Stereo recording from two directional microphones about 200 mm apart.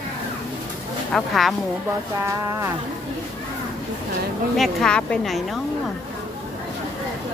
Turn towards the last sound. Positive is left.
turn(degrees=0)  # may be behind; listen again after turning